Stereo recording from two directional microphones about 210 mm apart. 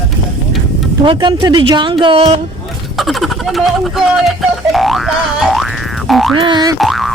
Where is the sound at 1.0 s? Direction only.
25° right (ahead or behind).